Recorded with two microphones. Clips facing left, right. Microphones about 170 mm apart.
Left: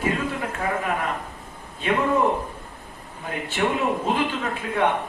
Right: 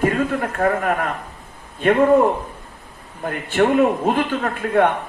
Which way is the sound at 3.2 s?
55° right (ahead or behind).